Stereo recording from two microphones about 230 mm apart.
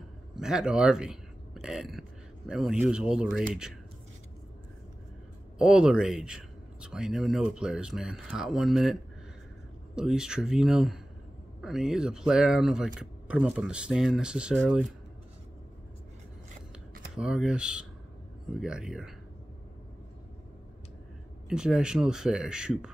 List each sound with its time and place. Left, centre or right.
0.4 s speech: centre
5.6 s speech: centre
9.9 s speech: centre
17.1 s speech: centre
21.5 s speech: centre